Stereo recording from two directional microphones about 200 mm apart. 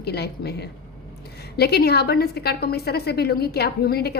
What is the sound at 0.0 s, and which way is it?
A woman's voice, 55° left (ahead or behind).